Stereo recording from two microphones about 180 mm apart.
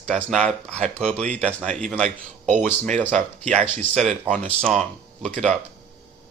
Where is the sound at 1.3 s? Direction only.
5° left (ahead or behind).